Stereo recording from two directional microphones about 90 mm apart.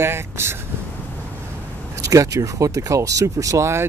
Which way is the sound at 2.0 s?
35° right (ahead or behind).